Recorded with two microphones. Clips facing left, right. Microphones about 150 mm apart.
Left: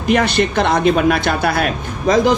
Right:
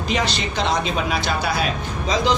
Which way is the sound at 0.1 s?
55° left (ahead or behind).